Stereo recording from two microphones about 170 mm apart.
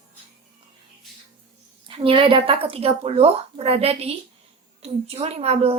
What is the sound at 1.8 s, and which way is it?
A woman's voice, 30° right (ahead or behind).